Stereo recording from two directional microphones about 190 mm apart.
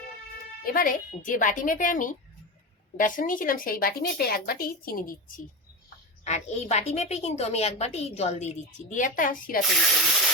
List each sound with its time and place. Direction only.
0.6 s a woman's voice: 50° left (ahead or behind)
6.2 s a woman's voice: 35° left (ahead or behind)
9.6 s speech: centre (ahead or behind)